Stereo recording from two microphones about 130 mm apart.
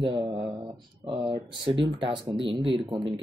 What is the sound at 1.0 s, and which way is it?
Speech, 40° right (ahead or behind).